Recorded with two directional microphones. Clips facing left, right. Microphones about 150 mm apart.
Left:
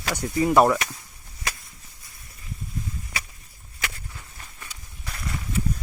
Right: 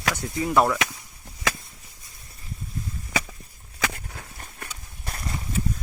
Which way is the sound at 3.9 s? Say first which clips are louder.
Right 4 dB; 65° right (ahead or behind).